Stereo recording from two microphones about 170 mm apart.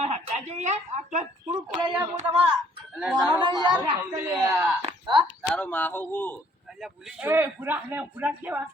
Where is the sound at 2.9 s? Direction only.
5° right (ahead or behind).